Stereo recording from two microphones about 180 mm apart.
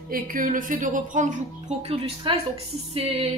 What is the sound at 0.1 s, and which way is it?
A woman's voice, 50° right (ahead or behind).